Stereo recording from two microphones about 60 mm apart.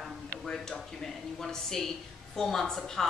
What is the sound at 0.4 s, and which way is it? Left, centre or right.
A woman's voice, centre.